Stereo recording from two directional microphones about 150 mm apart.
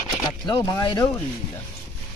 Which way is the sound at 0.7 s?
25° left (ahead or behind).